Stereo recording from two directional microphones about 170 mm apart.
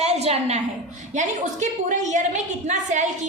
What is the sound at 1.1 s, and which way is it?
A woman's voice, 45° right (ahead or behind).